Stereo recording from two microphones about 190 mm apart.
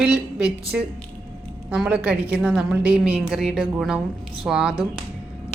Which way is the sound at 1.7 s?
10° right (ahead or behind).